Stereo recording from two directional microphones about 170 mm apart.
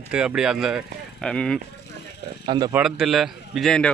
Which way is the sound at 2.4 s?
25° right (ahead or behind).